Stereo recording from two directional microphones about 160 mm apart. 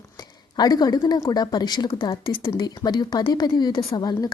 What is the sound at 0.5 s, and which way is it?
A woman's voice, 25° left (ahead or behind).